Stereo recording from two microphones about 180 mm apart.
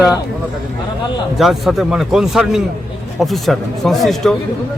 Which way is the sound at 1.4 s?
Centre (ahead or behind).